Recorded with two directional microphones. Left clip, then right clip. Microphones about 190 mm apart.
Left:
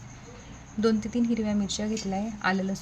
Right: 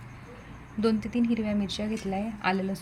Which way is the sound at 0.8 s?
5° left (ahead or behind).